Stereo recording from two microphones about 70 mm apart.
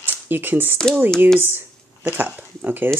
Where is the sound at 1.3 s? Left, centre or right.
Right.